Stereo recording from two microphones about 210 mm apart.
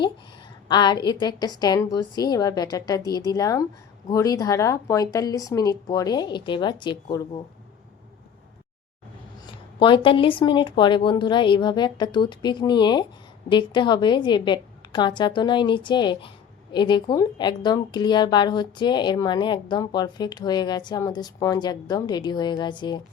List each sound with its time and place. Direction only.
0.7 s a woman's voice: 20° left (ahead or behind)
9.7 s speech: 25° left (ahead or behind)